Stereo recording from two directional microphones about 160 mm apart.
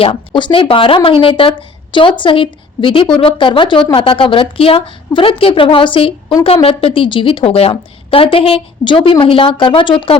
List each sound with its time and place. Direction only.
0.0 s a woman's voice: 30° left (ahead or behind)